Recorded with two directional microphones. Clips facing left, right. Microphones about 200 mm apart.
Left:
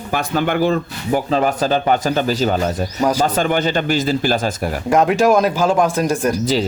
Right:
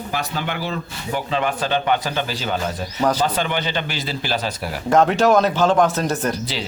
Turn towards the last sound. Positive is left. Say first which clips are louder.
# left 4 dB
turn(degrees=10)  # may be behind; listen again after turning